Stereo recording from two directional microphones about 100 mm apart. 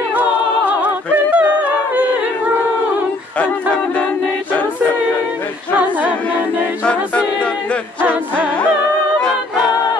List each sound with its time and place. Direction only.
0.1 s a capella: 15° right (ahead or behind)
8.0 s music: 20° right (ahead or behind)